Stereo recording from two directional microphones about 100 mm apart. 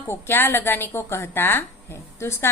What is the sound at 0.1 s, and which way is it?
A woman's voice, 20° left (ahead or behind).